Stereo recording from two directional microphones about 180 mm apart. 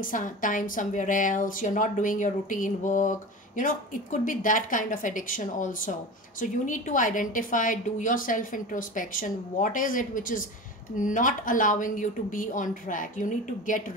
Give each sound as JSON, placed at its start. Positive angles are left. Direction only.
{"t": 0.0, "sound": "a woman's voice", "side_deg": 50}